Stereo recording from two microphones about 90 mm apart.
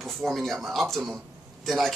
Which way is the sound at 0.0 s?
Centre (ahead or behind).